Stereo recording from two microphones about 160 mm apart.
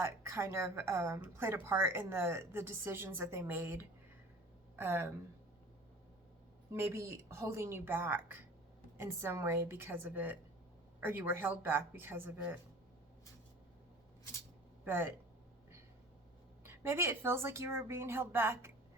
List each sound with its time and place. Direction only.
0.0 s a woman's voice: 15° right (ahead or behind)
6.7 s a woman's voice: 15° right (ahead or behind)
14.8 s speech: 15° right (ahead or behind)
16.6 s a woman's voice: 15° right (ahead or behind)